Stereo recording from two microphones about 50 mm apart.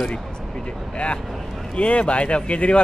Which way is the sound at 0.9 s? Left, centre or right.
Left.